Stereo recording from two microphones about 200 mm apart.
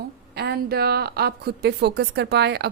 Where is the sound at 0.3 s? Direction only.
50° right (ahead or behind).